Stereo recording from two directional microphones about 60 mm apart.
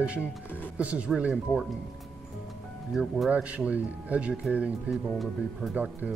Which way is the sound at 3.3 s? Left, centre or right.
Right.